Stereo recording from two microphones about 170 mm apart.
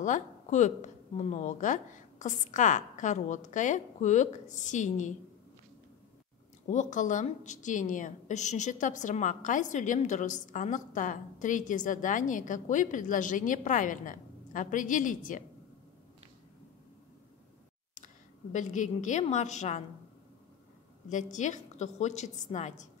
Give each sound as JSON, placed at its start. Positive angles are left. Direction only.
{"t": 0.0, "sound": "a woman's voice", "side_deg": 45}
{"t": 6.7, "sound": "a woman's voice", "side_deg": 45}
{"t": 17.9, "sound": "a woman's voice", "side_deg": 45}
{"t": 21.1, "sound": "a woman's voice", "side_deg": 45}